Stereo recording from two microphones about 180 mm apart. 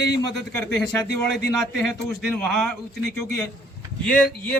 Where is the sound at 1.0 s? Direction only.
70° left (ahead or behind).